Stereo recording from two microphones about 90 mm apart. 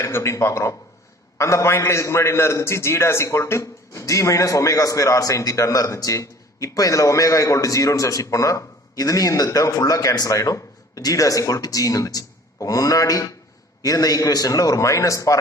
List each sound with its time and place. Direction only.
0.0 s a man's voice: 30° left (ahead or behind)